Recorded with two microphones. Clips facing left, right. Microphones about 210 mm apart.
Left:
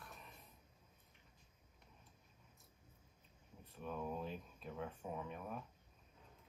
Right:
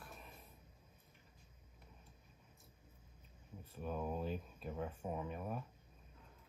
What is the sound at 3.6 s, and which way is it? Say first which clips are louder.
Speech: right 3 dB; 5° right (ahead or behind).